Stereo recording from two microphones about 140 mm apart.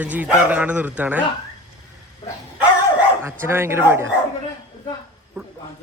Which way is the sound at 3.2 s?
15° right (ahead or behind).